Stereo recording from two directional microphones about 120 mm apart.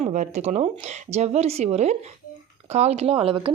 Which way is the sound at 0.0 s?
80° right.